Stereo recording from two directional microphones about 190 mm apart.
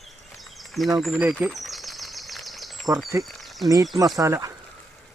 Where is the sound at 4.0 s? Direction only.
20° right (ahead or behind).